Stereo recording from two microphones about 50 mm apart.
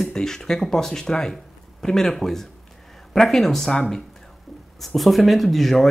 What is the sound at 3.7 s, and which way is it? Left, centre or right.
Speech, centre.